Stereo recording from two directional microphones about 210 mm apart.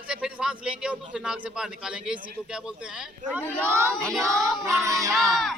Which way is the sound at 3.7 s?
10° right (ahead or behind).